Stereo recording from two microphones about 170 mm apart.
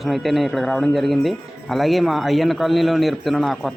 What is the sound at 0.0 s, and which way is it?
Speech, centre (ahead or behind).